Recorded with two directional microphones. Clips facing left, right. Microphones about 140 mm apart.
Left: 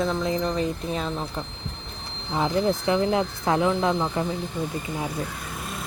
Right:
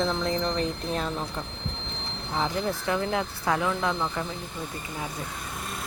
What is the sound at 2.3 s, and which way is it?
Speech, 15° left (ahead or behind).